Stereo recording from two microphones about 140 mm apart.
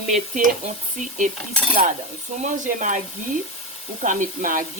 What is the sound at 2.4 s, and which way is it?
Speech, 65° right (ahead or behind).